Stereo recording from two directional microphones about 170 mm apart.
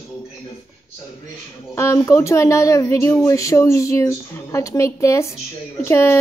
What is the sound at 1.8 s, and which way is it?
A woman's voice, 15° left (ahead or behind).